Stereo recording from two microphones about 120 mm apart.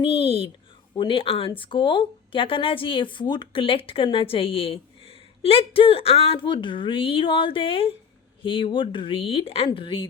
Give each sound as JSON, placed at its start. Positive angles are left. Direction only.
{"t": 0.0, "sound": "speech", "side_deg": 55}